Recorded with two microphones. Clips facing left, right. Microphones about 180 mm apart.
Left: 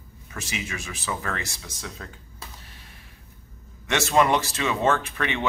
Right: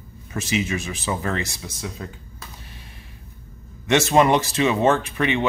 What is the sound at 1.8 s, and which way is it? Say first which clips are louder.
Speech: right 6 dB; 10° right (ahead or behind).